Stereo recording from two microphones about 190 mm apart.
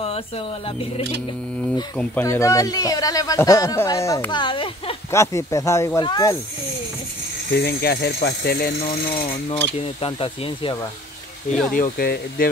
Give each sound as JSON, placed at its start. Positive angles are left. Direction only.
{"t": 0.0, "sound": "speech", "side_deg": 30}
{"t": 2.0, "sound": "speech", "side_deg": 10}
{"t": 5.1, "sound": "speech", "side_deg": 15}
{"t": 7.5, "sound": "speech", "side_deg": 60}
{"t": 9.1, "sound": "speech", "side_deg": 25}
{"t": 11.7, "sound": "speech", "side_deg": 50}